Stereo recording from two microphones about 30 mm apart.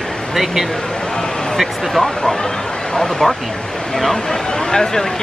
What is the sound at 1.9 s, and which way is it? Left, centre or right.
Speech, centre.